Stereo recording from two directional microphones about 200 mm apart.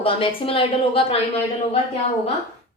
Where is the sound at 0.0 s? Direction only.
25° left (ahead or behind).